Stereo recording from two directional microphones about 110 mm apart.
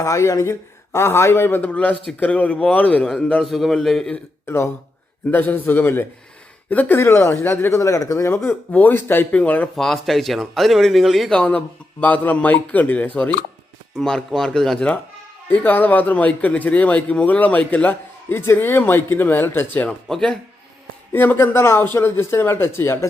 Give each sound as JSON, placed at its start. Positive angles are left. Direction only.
{"t": 0.0, "sound": "speech", "side_deg": 30}
{"t": 3.4, "sound": "speech", "side_deg": 0}
{"t": 4.1, "sound": "speech", "side_deg": 20}
{"t": 8.4, "sound": "speech", "side_deg": 15}
{"t": 9.7, "sound": "speech", "side_deg": 0}
{"t": 20.1, "sound": "speech", "side_deg": 5}
{"t": 21.1, "sound": "speech", "side_deg": 20}